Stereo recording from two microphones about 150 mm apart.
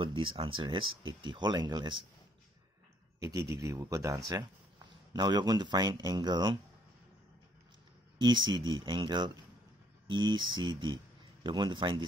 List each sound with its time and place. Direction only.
0.0 s speech: 35° right (ahead or behind)
3.2 s speech: 25° right (ahead or behind)
8.2 s speech: 30° right (ahead or behind)